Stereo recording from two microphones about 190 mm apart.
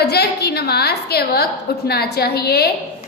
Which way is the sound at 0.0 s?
55° left (ahead or behind).